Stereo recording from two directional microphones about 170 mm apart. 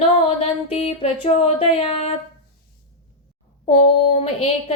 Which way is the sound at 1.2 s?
35° left (ahead or behind).